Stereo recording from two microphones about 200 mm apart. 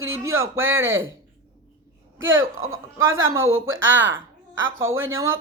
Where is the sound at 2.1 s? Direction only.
70° right (ahead or behind).